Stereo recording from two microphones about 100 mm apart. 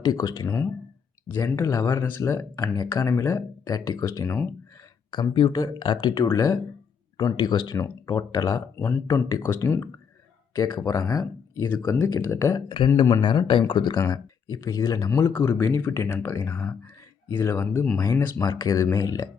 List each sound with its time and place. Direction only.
0.0 s speech: 45° left (ahead or behind)
0.4 s speech: 15° left (ahead or behind)
1.3 s speech: 30° left (ahead or behind)
3.7 s speech: 40° left (ahead or behind)
5.3 s speech: 50° left (ahead or behind)
6.3 s speech: 35° left (ahead or behind)
7.3 s speech: 45° left (ahead or behind); by 9.9 s 25° left (ahead or behind)
10.5 s speech: 40° left (ahead or behind)
12.5 s speech: 55° left (ahead or behind); by 15.3 s 35° left (ahead or behind)
15.3 s speech: 20° left (ahead or behind)
17.9 s speech: 40° left (ahead or behind)